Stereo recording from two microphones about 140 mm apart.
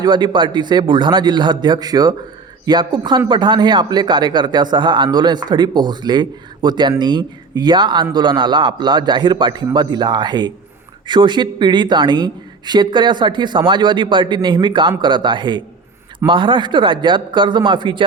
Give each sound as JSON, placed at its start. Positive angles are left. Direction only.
{"t": 0.0, "sound": "speech", "side_deg": -30}